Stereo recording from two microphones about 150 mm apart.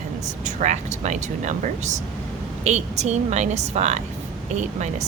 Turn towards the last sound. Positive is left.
turn(degrees=-50)  # may be behind; listen again after turning